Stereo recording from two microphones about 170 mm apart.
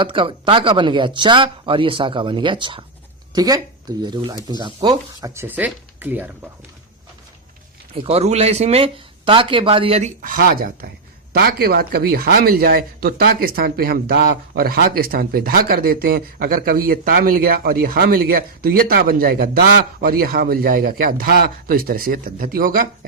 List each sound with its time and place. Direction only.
0.0 s speech: 30° right (ahead or behind); by 6.5 s 10° right (ahead or behind)
8.0 s speech: 40° right (ahead or behind)
10.2 s speech: 55° right (ahead or behind)